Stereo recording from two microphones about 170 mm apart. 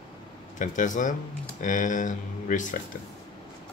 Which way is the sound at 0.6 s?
50° left (ahead or behind).